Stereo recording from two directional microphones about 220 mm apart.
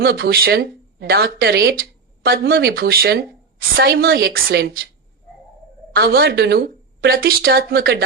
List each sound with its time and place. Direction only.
0.0 s a woman's voice: 45° right (ahead or behind)
5.9 s a woman's voice: 45° right (ahead or behind)